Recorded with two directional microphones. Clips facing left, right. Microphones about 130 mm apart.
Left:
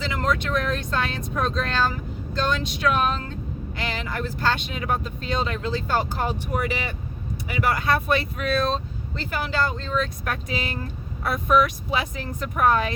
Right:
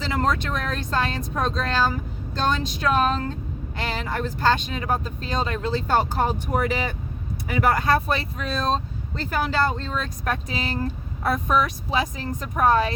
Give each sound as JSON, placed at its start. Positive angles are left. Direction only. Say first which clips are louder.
{"t": 0.0, "sound": "speech", "louder": "right 1 dB", "side_deg": -40}